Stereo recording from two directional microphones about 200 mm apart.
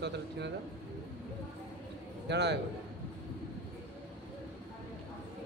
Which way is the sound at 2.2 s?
60° right (ahead or behind).